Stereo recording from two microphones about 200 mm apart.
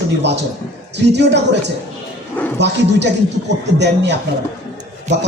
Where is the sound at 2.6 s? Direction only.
60° right (ahead or behind).